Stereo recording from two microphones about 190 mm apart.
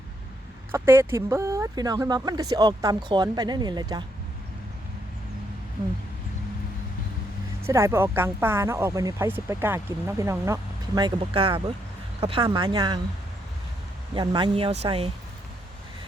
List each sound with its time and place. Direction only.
0.7 s speech: 10° right (ahead or behind)
7.7 s speech: 15° right (ahead or behind)
14.1 s speech: 25° right (ahead or behind)